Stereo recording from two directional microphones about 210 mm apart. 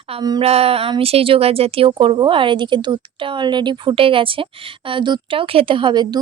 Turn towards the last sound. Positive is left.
turn(degrees=-20)  # may be behind; listen again after turning